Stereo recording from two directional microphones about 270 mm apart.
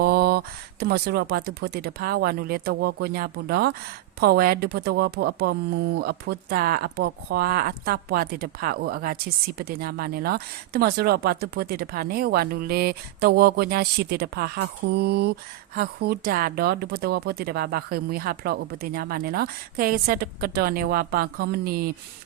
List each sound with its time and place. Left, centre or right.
0.0 s speech: right